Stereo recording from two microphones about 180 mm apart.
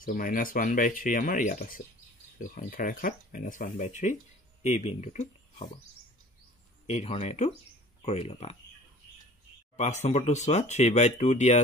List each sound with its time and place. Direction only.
0.0 s speech: 50° left (ahead or behind)
6.9 s speech: 35° left (ahead or behind)
9.8 s speech: 40° left (ahead or behind)